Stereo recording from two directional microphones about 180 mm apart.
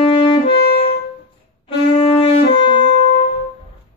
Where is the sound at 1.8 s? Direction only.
35° left (ahead or behind).